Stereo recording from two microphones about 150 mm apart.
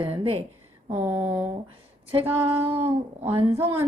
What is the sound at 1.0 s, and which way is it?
A woman's voice, 20° right (ahead or behind).